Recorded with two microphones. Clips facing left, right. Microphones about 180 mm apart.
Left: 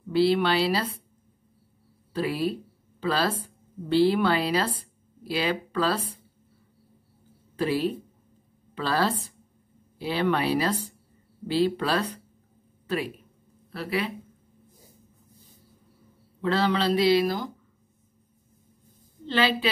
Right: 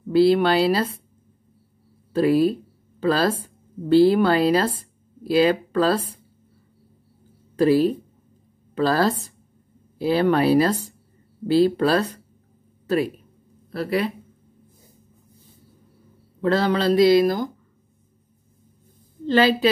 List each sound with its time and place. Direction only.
0.1 s speech: 45° right (ahead or behind)
2.1 s a woman's voice: 45° right (ahead or behind)
7.5 s speech: 40° right (ahead or behind)
16.3 s speech: 45° right (ahead or behind)
19.2 s speech: 45° right (ahead or behind)